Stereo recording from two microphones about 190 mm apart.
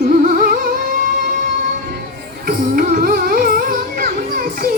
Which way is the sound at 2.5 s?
50° right (ahead or behind).